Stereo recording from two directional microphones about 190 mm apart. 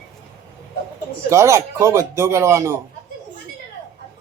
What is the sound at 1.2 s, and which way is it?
Speech, 15° right (ahead or behind).